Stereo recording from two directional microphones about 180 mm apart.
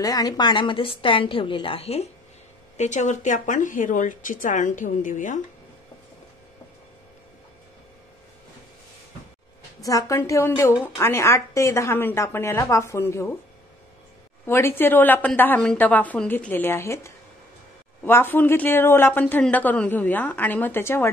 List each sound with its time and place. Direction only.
0.0 s a woman's voice: 20° left (ahead or behind); by 5.4 s 45° left (ahead or behind)
9.8 s speech: 15° left (ahead or behind)
14.4 s speech: 15° left (ahead or behind)